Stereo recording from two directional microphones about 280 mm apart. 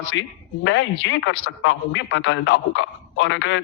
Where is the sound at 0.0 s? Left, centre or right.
Left.